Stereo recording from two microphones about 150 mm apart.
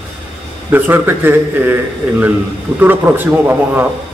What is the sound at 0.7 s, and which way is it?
Speech, 15° right (ahead or behind).